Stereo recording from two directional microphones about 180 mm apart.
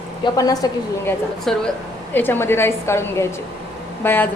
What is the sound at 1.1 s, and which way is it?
A woman's voice, 5° left (ahead or behind).